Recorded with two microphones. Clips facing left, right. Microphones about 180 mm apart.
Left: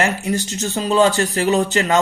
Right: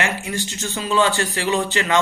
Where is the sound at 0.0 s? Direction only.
40° left (ahead or behind).